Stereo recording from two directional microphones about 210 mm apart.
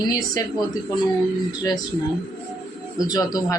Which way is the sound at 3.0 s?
15° left (ahead or behind).